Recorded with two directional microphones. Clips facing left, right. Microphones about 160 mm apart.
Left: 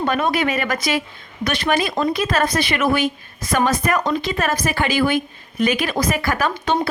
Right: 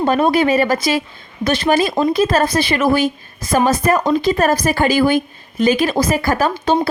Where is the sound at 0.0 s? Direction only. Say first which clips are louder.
Right 5 dB; 30° right (ahead or behind).